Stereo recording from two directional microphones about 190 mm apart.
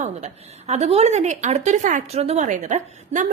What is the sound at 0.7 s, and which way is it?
A woman's voice, 35° right (ahead or behind).